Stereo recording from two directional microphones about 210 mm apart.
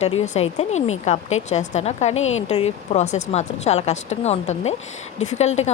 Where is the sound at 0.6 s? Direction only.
30° left (ahead or behind).